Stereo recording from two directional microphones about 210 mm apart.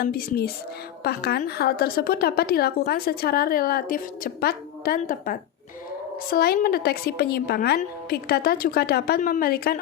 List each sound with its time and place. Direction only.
0.0 s a woman's voice: 45° left (ahead or behind)